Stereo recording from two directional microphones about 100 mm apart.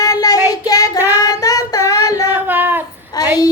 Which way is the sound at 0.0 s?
40° left (ahead or behind).